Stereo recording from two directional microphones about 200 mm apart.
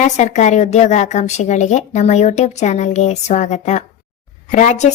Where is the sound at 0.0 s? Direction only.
35° left (ahead or behind).